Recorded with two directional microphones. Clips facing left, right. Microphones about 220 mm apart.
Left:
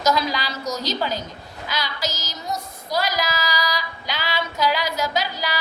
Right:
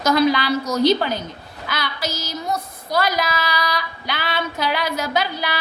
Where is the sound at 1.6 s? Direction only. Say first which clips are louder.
Right 1 dB; 55° right (ahead or behind).